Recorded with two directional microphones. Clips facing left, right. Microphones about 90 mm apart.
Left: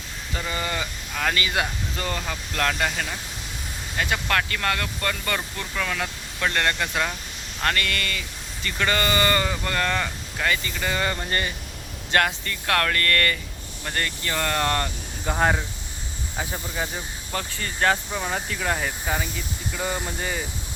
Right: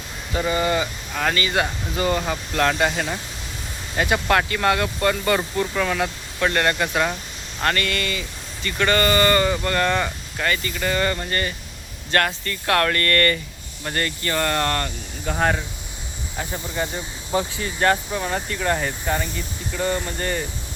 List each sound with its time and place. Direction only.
0.3 s speech: 10° right (ahead or behind)
2.0 s speech: 10° right (ahead or behind); by 12.5 s 10° left (ahead or behind)
12.6 s speech: 5° right (ahead or behind)
17.3 s speech: 15° right (ahead or behind)
17.7 s speech: 5° right (ahead or behind)